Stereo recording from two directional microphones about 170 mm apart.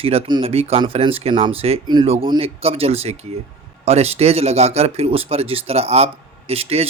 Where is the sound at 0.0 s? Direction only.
35° right (ahead or behind).